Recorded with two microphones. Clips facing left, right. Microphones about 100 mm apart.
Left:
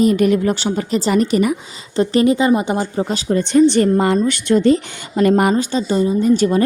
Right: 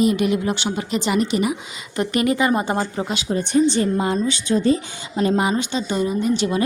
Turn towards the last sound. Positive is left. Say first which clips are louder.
# left 6 dB
turn(degrees=45)  # may be behind; listen again after turning